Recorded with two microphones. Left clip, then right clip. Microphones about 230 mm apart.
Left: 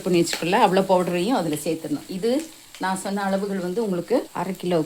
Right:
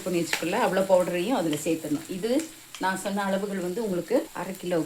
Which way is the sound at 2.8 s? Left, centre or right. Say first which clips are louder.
Left 2 dB; left.